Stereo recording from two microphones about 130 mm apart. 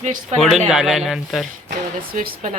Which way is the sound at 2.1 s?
90° right.